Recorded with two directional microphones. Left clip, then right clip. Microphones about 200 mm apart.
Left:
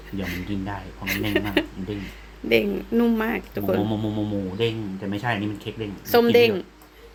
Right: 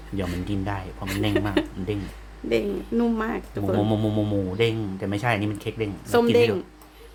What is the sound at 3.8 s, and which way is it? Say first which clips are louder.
Speech: right 2 dB; 25° right (ahead or behind).